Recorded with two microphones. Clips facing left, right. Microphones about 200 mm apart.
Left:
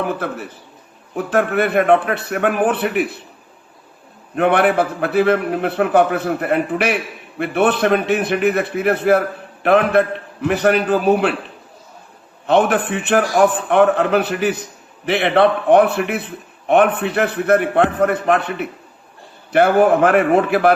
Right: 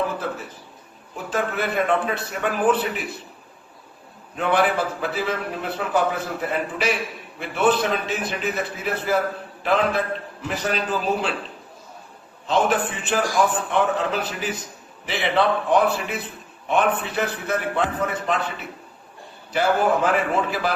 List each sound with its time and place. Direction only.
0.0 s a man's voice: 65° left (ahead or behind)
4.4 s a man's voice: 60° left (ahead or behind)
12.5 s a man's voice: 60° left (ahead or behind)